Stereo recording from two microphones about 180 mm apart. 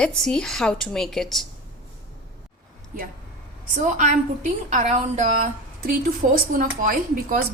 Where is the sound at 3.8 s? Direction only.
45° right (ahead or behind).